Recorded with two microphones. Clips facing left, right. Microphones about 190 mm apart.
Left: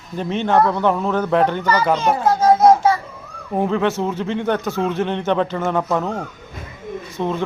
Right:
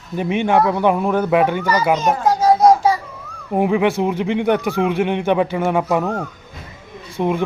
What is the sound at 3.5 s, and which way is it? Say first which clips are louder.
Speech: right 3 dB; 15° right (ahead or behind).